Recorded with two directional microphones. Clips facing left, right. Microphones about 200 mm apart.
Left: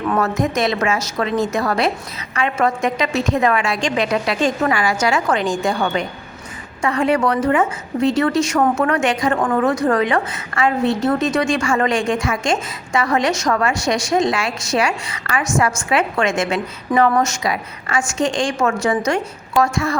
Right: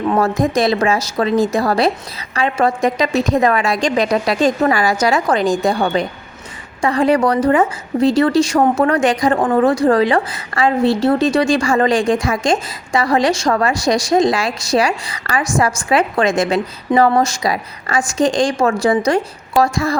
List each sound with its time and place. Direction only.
0.1 s a woman's voice: 30° right (ahead or behind)